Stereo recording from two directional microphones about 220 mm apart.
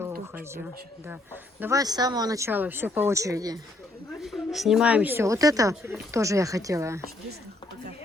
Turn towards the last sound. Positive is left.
turn(degrees=-15)  # may be behind; listen again after turning